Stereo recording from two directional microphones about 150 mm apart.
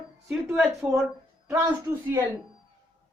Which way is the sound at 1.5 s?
15° right (ahead or behind).